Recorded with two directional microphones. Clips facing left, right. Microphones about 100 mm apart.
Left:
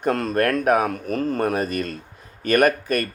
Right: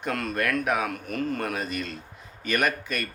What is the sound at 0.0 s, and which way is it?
Speech, 35° left (ahead or behind).